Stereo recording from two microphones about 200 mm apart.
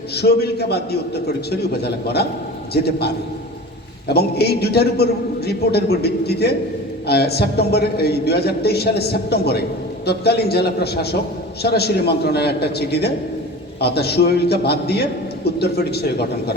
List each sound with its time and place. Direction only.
0.2 s a man's voice: 55° left (ahead or behind)
4.1 s a man's voice: 55° left (ahead or behind)